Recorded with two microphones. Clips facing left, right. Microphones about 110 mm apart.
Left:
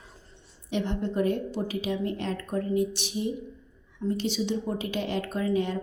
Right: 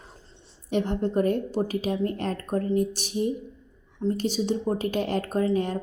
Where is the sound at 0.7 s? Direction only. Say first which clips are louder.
Right 4 dB; 40° right (ahead or behind).